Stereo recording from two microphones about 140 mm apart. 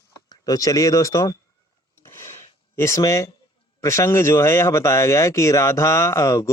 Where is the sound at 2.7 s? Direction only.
20° left (ahead or behind).